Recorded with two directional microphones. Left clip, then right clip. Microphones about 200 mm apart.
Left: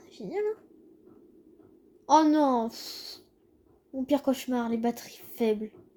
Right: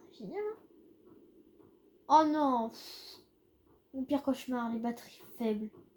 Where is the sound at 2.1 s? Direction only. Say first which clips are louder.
Left 4 dB; 45° left (ahead or behind).